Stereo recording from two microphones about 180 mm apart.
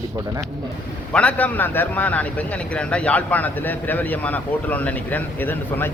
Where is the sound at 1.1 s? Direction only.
5° left (ahead or behind).